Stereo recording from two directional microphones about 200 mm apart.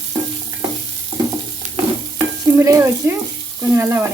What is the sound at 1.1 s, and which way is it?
Stir, 25° right (ahead or behind).